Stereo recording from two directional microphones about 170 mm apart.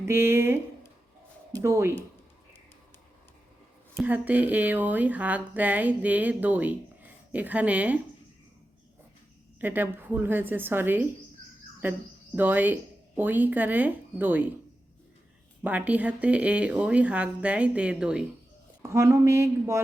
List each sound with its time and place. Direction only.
0.0 s speech: 15° right (ahead or behind)
1.6 s speech: 15° right (ahead or behind)
3.9 s speech: 10° right (ahead or behind)
9.6 s speech: 10° right (ahead or behind)
15.6 s speech: 10° right (ahead or behind)
18.8 s speech: 15° right (ahead or behind)